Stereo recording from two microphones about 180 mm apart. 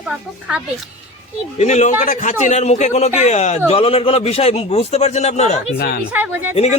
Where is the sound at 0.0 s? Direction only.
10° right (ahead or behind).